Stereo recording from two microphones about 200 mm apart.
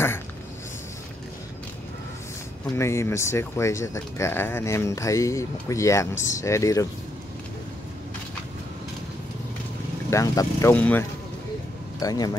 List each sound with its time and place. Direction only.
2.8 s speech: 15° left (ahead or behind)
10.0 s speech: 15° left (ahead or behind)